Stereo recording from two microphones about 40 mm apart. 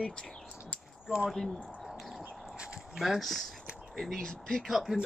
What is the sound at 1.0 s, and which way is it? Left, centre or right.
Speech, centre.